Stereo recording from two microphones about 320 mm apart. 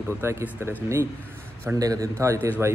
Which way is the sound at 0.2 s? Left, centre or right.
Centre.